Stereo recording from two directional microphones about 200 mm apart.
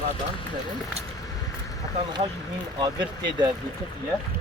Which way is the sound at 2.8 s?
20° right (ahead or behind).